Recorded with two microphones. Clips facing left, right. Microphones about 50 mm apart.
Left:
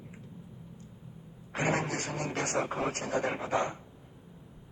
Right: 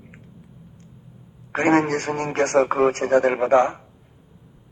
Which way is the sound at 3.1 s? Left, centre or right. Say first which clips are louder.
Right 13 dB; right.